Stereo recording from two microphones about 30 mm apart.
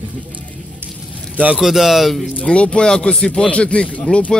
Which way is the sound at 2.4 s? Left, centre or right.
Left.